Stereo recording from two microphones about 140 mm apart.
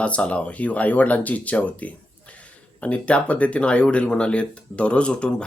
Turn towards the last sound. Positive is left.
turn(degrees=10)  # may be behind; listen again after turning